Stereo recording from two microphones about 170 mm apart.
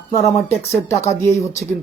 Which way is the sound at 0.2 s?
15° left (ahead or behind).